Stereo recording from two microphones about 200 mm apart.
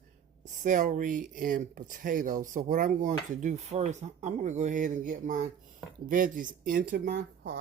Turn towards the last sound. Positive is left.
turn(degrees=-55)  # may be behind; listen again after turning